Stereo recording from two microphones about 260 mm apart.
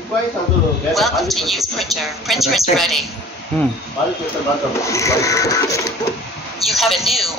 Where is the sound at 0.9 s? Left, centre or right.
Centre.